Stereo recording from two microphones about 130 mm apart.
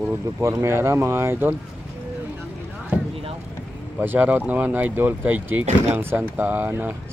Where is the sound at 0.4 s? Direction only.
20° right (ahead or behind).